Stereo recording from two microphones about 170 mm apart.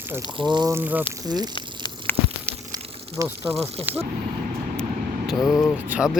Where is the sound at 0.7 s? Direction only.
10° right (ahead or behind).